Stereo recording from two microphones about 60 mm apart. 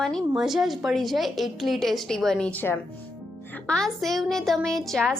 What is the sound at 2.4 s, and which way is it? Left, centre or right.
Speech, left.